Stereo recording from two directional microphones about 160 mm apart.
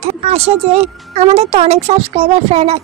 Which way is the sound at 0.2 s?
40° right (ahead or behind).